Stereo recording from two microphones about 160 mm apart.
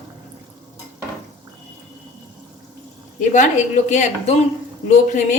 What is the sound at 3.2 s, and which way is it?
A woman's voice, 50° left (ahead or behind).